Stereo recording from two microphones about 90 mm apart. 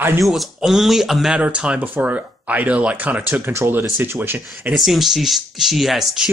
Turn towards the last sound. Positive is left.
turn(degrees=0)  # may be behind; listen again after turning